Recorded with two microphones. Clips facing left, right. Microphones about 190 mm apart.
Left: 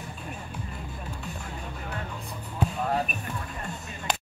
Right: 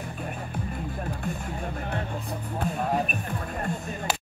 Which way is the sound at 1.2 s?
50° right (ahead or behind).